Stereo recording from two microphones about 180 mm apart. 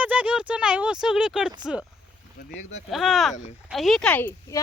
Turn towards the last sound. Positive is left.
turn(degrees=10)  # may be behind; listen again after turning